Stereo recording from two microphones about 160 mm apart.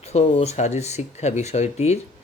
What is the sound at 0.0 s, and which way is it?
Speech, 40° left (ahead or behind).